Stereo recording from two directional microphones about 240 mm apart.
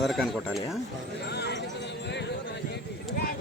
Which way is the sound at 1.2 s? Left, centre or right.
Left.